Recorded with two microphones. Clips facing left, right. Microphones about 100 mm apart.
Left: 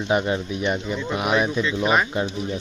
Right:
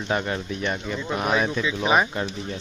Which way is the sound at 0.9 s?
5° left (ahead or behind).